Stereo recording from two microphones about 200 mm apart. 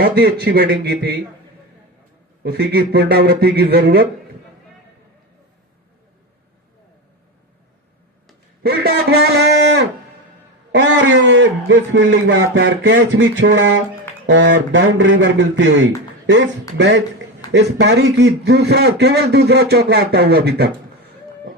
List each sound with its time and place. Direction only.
0.2 s speech: 50° right (ahead or behind)
2.4 s speech: 55° right (ahead or behind)
8.6 s a man's voice: 55° right (ahead or behind)